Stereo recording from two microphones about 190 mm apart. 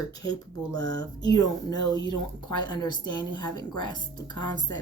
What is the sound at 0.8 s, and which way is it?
Speech, 80° right.